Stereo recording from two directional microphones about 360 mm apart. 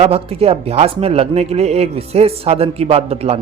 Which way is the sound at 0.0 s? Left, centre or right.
Centre.